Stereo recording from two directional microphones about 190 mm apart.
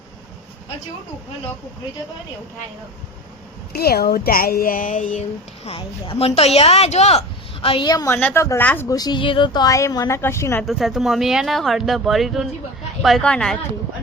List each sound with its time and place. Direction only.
3.7 s speech: 55° left (ahead or behind)
5.6 s a woman's voice: 30° left (ahead or behind); by 10.7 s 15° left (ahead or behind)
10.7 s speech: centre (ahead or behind)